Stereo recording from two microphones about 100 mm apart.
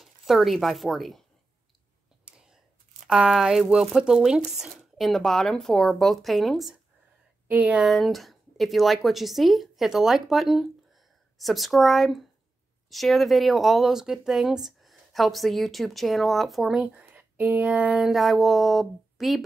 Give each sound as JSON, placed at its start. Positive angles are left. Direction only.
{"t": 0.0, "sound": "speech", "side_deg": 0}
{"t": 2.2, "sound": "a sound", "side_deg": -10}
{"t": 3.1, "sound": "speech", "side_deg": -5}
{"t": 7.4, "sound": "speech", "side_deg": -10}
{"t": 7.8, "sound": "speech", "side_deg": 0}
{"t": 17.1, "sound": "speech", "side_deg": -15}
{"t": 17.9, "sound": "speech", "side_deg": 0}